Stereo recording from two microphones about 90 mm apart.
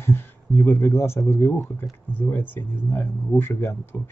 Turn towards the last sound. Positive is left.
turn(degrees=25)  # may be behind; listen again after turning